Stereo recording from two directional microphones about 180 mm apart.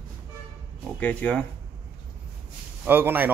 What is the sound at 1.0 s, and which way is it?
Speech, 10° left (ahead or behind).